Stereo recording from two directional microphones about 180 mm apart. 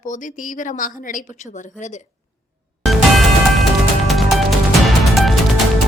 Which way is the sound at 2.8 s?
Centre (ahead or behind).